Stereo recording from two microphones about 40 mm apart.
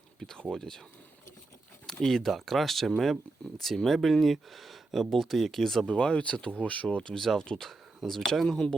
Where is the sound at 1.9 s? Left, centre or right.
Centre.